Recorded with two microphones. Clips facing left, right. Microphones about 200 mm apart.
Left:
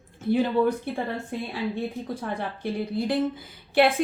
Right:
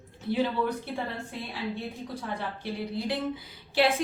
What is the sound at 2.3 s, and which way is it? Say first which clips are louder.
Speech: left 2 dB; 50° left (ahead or behind).